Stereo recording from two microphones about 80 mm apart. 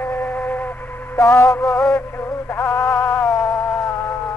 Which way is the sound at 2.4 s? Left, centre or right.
Left.